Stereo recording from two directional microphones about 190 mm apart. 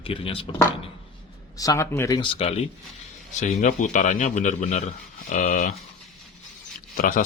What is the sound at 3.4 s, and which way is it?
A man's voice, 40° left (ahead or behind).